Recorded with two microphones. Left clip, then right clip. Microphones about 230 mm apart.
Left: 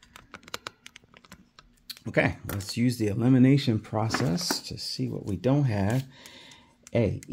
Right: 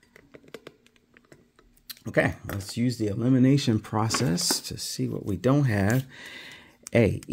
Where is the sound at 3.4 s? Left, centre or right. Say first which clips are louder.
Even; centre.